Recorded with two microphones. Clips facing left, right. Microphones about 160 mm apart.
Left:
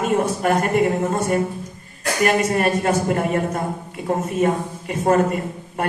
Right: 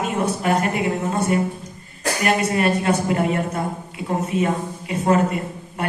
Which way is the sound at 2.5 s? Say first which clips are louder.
Even; 50° left (ahead or behind).